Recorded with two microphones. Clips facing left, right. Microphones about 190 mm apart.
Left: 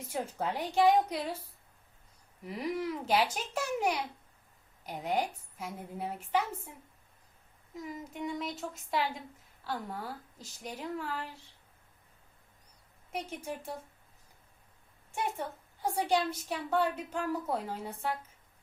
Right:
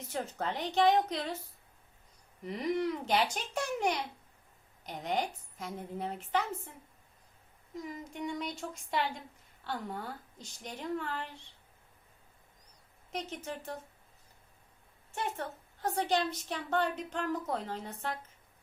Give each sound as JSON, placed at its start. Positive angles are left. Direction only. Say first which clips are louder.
{"t": 0.0, "sound": "a woman's voice", "louder": "left 1 dB", "side_deg": 10}
{"t": 2.4, "sound": "a woman's voice", "louder": "right 2 dB", "side_deg": 5}
{"t": 7.8, "sound": "speech", "louder": "even", "side_deg": 0}
{"t": 13.1, "sound": "a woman's voice", "louder": "left 1 dB", "side_deg": 10}
{"t": 15.1, "sound": "a woman's voice", "louder": "left 2 dB", "side_deg": 10}